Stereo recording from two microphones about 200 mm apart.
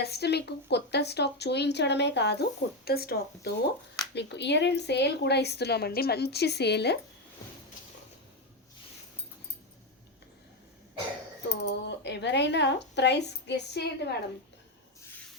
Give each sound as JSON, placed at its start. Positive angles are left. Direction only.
{"t": 0.0, "sound": "speech", "side_deg": 55}
{"t": 11.4, "sound": "speech", "side_deg": 60}